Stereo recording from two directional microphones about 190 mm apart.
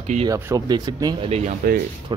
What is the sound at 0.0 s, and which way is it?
Speech, 35° right (ahead or behind).